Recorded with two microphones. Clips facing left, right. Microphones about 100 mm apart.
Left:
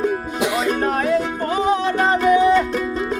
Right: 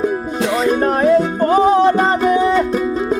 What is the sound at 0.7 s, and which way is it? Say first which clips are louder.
Music: right 8 dB; 30° right (ahead or behind).